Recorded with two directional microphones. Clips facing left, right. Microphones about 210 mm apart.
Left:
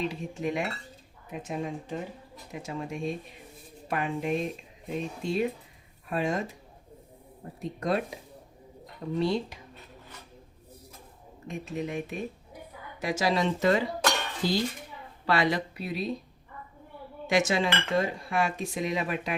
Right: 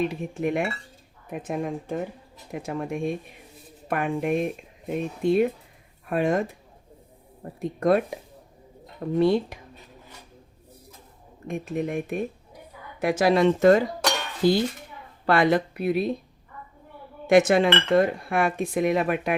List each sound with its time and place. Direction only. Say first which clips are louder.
0.0 s speech: right 5 dB; 55° right (ahead or behind)
7.6 s speech: right 7 dB; 55° right (ahead or behind)
11.4 s speech: right 5 dB; 55° right (ahead or behind)
17.2 s speech: right 8 dB; 55° right (ahead or behind)